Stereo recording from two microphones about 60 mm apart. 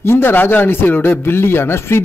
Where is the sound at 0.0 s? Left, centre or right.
Left.